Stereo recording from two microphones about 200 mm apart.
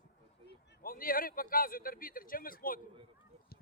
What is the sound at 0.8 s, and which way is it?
A man's voice, 45° left (ahead or behind).